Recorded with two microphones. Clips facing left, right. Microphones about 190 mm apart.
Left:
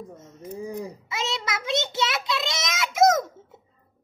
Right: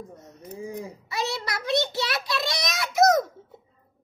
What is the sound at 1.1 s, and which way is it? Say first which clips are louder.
A child's voice: right 1 dB; 20° left (ahead or behind).